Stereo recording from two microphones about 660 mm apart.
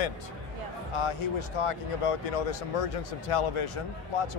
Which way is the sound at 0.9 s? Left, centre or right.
Left.